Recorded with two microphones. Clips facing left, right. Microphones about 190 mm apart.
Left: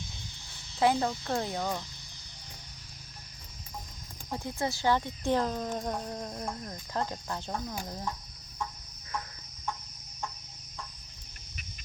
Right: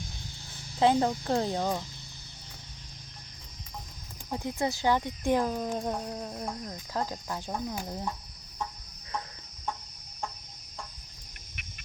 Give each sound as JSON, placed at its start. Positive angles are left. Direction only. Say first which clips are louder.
{"t": 0.8, "sound": "speech", "louder": "right 3 dB", "side_deg": -25}
{"t": 4.3, "sound": "speech", "louder": "right 2 dB", "side_deg": -20}